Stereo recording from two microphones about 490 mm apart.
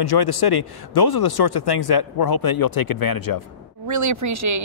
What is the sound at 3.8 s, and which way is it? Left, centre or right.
Speech, right.